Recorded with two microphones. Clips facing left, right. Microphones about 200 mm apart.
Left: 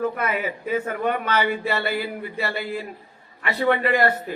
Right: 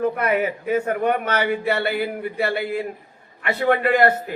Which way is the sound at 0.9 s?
55° right (ahead or behind).